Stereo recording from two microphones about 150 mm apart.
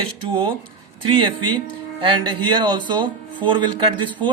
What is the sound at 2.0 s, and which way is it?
Speech, 30° right (ahead or behind).